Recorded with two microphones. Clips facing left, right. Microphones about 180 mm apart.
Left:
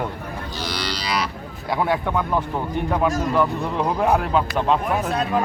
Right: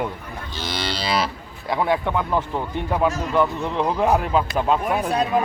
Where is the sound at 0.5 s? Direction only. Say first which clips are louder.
Right 2 dB; 25° right (ahead or behind).